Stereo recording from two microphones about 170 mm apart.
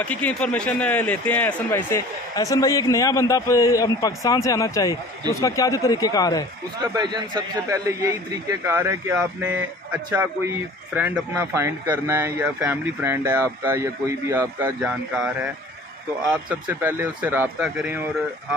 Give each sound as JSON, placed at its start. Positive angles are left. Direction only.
{"t": 0.0, "sound": "a man's voice", "side_deg": 5}
{"t": 6.9, "sound": "speech", "side_deg": -25}